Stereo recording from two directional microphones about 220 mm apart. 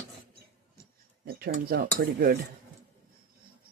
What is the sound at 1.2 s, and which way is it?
Speech, 45° right (ahead or behind).